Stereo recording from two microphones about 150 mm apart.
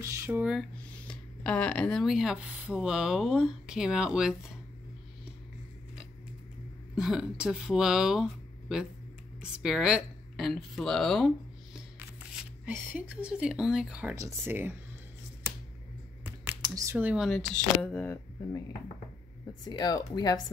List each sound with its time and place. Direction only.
0.0 s speech: 20° right (ahead or behind)
0.6 s speech: 5° left (ahead or behind)
7.0 s a woman's voice: 5° right (ahead or behind)
12.0 s speech: 15° right (ahead or behind)
14.1 s speech: 20° right (ahead or behind)
16.3 s computer keyboard: 20° right (ahead or behind)
17.8 s speech: 10° left (ahead or behind)
19.4 s speech: 25° left (ahead or behind)